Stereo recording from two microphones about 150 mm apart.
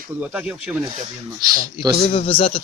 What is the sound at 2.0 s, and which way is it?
Speech, 40° left (ahead or behind).